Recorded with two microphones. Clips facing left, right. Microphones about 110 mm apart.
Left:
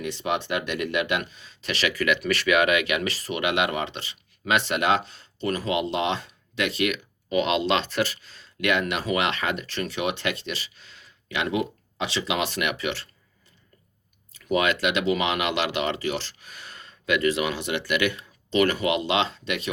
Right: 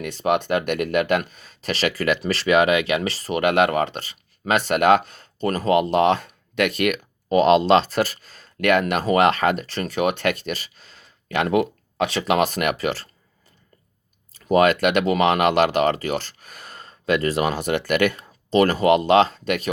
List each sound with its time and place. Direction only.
0.0 s speech: 50° right (ahead or behind)
14.3 s speech: 40° right (ahead or behind)